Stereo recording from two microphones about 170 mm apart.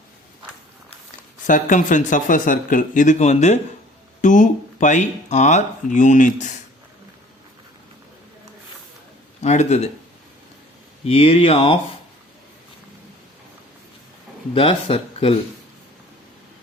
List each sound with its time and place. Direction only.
1.5 s speech: 50° left (ahead or behind)
9.4 s speech: 40° left (ahead or behind)
11.0 s speech: 35° left (ahead or behind)
14.5 s speech: 35° left (ahead or behind)